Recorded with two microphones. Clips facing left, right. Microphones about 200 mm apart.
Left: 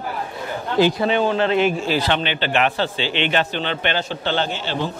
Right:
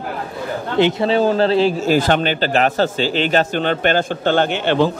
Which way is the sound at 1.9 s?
45° right (ahead or behind).